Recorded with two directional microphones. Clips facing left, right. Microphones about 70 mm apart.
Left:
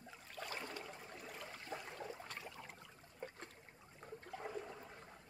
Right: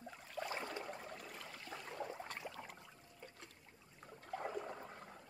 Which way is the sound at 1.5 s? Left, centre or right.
Left.